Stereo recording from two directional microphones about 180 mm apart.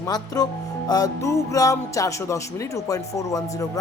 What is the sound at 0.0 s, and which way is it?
A woman's voice, 20° left (ahead or behind).